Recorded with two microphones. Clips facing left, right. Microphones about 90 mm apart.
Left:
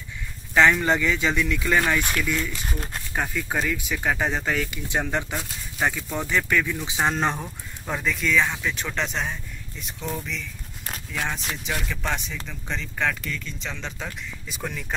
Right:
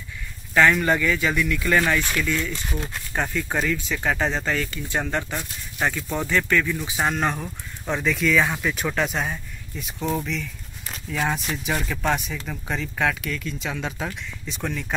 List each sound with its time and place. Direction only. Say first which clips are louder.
0.6 s speech: even; 20° left (ahead or behind)
7.4 s speech: right 3 dB; 5° left (ahead or behind)
11.1 s speech: right 4 dB; 10° right (ahead or behind)
14.5 s speech: right 3 dB; 5° left (ahead or behind)